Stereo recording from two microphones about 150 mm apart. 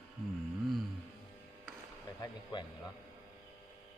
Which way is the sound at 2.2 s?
30° left (ahead or behind).